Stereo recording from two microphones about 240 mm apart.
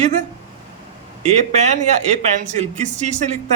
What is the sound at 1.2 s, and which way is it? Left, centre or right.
Speech, right.